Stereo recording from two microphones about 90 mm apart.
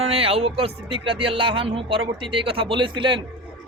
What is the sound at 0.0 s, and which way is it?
Speech, 90° right.